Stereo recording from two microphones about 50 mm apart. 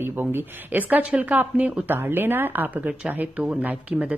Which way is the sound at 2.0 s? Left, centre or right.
Right.